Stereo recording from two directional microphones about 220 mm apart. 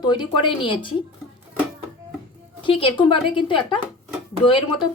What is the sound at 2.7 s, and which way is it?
Speech, 25° left (ahead or behind).